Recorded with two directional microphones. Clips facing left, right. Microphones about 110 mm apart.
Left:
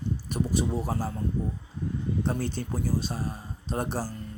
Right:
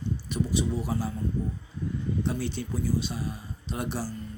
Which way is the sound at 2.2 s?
45° left (ahead or behind).